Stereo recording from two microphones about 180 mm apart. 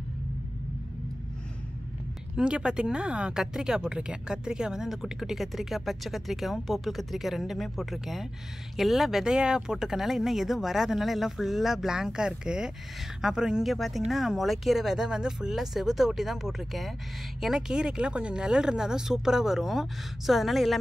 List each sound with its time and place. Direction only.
2.3 s speech: 5° right (ahead or behind)